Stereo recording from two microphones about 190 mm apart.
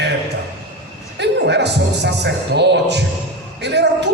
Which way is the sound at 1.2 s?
65° right (ahead or behind).